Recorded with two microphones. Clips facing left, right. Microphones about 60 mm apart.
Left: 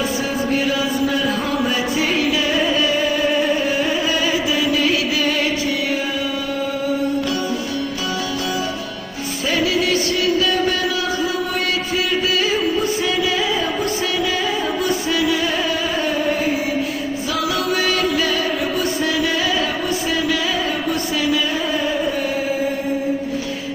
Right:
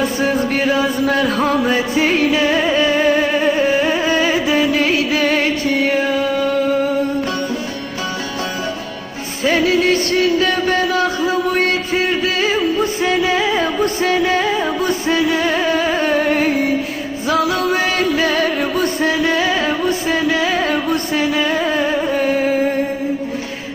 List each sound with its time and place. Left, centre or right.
0.2 s a sound: right
1.6 s music: right
9.4 s music: right
16.1 s music: right
17.2 s music: right